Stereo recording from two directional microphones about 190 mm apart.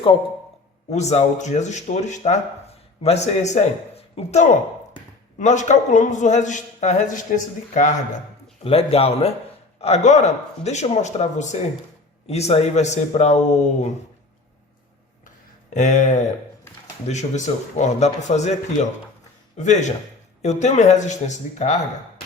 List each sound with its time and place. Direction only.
0.9 s speech: 35° left (ahead or behind)
15.7 s speech: 40° left (ahead or behind)